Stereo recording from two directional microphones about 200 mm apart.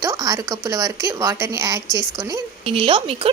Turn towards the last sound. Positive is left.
turn(degrees=-30)  # may be behind; listen again after turning